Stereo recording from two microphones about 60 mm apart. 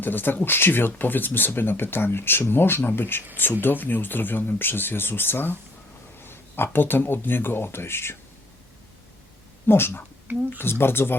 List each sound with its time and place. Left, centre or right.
0.0 s speech: left
9.6 s speech: left